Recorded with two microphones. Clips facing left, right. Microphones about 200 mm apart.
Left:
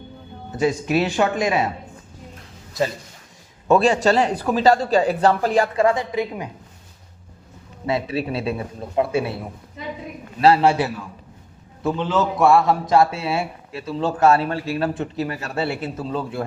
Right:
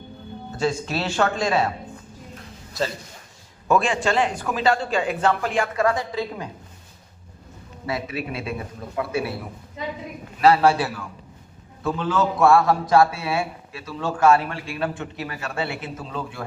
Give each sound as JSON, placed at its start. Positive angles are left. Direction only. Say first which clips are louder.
{"t": 0.5, "sound": "speech", "louder": "left 5 dB", "side_deg": 15}
{"t": 3.7, "sound": "a man's voice", "louder": "left 5 dB", "side_deg": 40}
{"t": 5.8, "sound": "a man's voice", "louder": "left 3 dB", "side_deg": 20}
{"t": 7.9, "sound": "a man's voice", "louder": "left 5 dB", "side_deg": 30}
{"t": 10.4, "sound": "a man's voice", "louder": "left 1 dB", "side_deg": 25}